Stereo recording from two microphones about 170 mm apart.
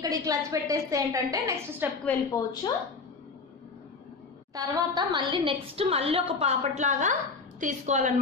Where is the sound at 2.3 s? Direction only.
20° left (ahead or behind).